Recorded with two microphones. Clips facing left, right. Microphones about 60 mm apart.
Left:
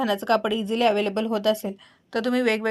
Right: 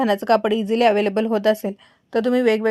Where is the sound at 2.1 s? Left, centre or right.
Left.